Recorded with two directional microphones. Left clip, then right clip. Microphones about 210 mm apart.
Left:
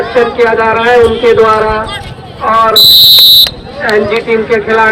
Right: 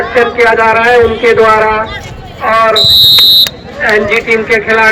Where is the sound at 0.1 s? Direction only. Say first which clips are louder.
Right 1 dB; 25° right (ahead or behind).